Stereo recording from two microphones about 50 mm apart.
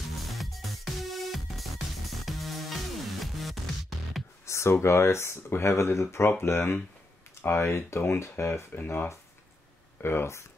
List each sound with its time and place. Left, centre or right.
0.2 s music: centre
4.5 s speech: left
8.8 s speech: left